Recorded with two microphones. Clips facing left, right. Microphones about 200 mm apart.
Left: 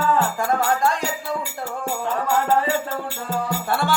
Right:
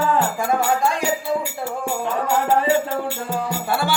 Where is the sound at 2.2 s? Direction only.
15° right (ahead or behind).